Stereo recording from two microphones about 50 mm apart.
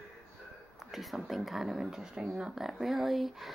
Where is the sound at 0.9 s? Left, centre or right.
Centre.